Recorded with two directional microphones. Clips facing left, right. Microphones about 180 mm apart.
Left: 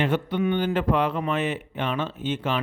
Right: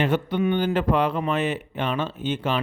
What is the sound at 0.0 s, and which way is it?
Speech, 40° right (ahead or behind).